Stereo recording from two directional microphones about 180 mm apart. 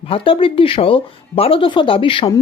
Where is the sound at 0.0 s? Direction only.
30° left (ahead or behind).